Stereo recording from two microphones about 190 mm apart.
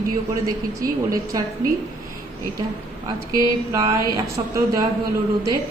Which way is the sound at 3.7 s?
20° right (ahead or behind).